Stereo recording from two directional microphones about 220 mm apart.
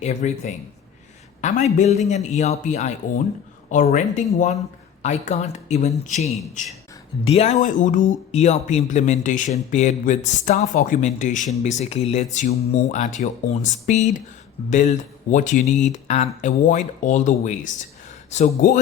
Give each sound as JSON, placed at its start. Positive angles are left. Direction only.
{"t": 0.0, "sound": "speech", "side_deg": 30}